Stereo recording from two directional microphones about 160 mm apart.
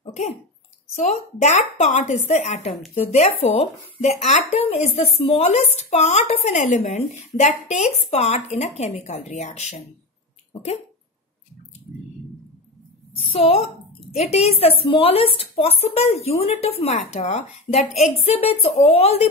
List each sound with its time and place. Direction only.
0.0 s cough: 45° left (ahead or behind)
0.9 s speech: 45° left (ahead or behind)
13.1 s speech: 35° left (ahead or behind)